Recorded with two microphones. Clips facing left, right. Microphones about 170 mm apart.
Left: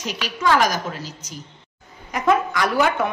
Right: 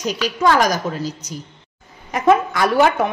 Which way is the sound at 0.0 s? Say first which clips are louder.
Right 6 dB; 35° right (ahead or behind).